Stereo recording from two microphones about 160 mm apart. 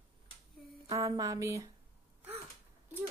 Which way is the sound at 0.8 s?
20° right (ahead or behind).